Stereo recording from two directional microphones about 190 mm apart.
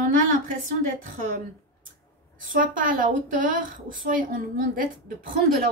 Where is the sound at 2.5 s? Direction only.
45° right (ahead or behind).